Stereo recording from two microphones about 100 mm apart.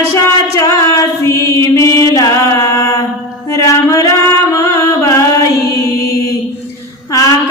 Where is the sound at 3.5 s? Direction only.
35° left (ahead or behind).